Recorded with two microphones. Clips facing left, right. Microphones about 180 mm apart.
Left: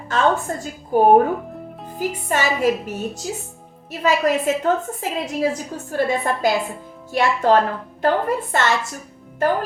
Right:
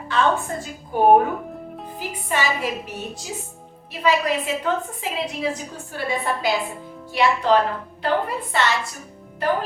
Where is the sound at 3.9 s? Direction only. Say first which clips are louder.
Left 2 dB; 45° left (ahead or behind).